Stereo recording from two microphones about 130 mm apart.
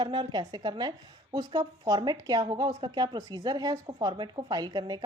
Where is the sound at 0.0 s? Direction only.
35° right (ahead or behind).